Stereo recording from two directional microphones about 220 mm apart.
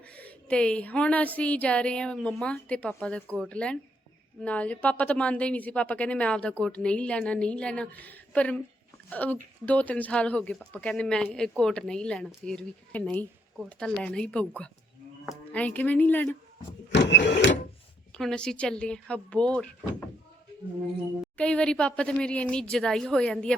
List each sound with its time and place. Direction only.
0.1 s speech: 5° left (ahead or behind)
16.9 s printer: 50° left (ahead or behind)
18.1 s speech: 5° left (ahead or behind)
21.3 s speech: 5° left (ahead or behind)